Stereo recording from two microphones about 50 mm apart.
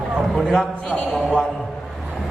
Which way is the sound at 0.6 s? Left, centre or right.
Left.